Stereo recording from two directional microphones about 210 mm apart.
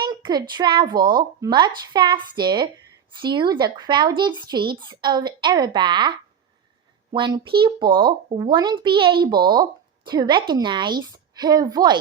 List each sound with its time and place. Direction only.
0.0 s speech: 20° right (ahead or behind)